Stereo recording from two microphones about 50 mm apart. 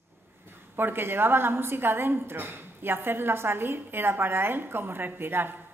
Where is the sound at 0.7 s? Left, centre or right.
Right.